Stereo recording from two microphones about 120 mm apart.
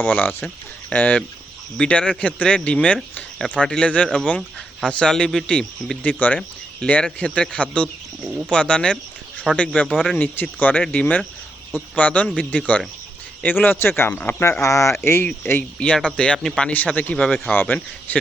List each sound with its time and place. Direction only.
0.0 s speech: 15° left (ahead or behind)
8.2 s speech: 5° right (ahead or behind)
8.4 s speech: 10° left (ahead or behind)
9.9 s speech: 5° right (ahead or behind)
10.2 s speech: 15° left (ahead or behind)
17.2 s speech: centre (ahead or behind)
17.5 s speech: 15° left (ahead or behind)